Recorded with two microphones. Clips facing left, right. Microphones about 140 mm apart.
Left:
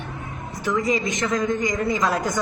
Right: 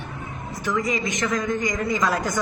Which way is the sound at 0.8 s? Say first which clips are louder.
Left 2 dB; 30° left (ahead or behind).